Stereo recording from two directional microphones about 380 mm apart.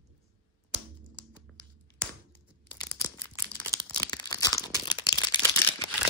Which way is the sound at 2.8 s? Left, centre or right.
Centre.